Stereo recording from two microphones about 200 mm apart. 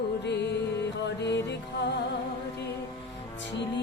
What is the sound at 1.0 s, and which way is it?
Music, 60° left (ahead or behind).